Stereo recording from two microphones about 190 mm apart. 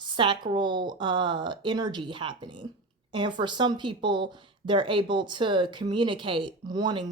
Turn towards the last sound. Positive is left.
turn(degrees=-20)  # may be behind; listen again after turning